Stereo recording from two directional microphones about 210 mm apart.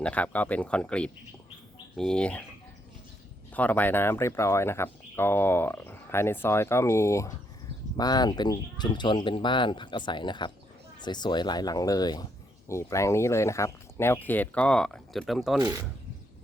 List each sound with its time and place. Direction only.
0.0 s speech: 5° left (ahead or behind)
3.5 s speech: 5° left (ahead or behind)
15.6 s speech: 20° right (ahead or behind)